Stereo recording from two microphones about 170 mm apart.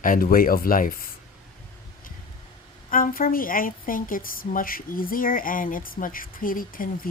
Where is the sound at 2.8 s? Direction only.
55° left (ahead or behind).